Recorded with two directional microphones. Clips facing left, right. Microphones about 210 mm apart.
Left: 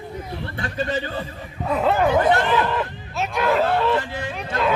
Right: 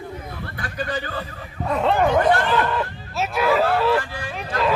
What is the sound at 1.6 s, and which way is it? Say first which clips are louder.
Speech: even; 5° left (ahead or behind).